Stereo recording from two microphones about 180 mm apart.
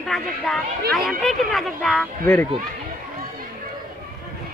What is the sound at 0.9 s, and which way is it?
Speech, centre (ahead or behind).